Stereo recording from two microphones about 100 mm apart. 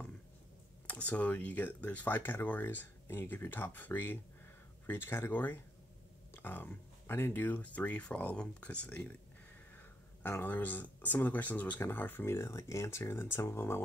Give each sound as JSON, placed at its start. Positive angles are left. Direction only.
{"t": 0.8, "sound": "speech", "side_deg": 15}